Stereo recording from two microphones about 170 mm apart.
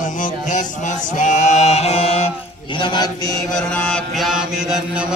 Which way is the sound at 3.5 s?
5° left (ahead or behind).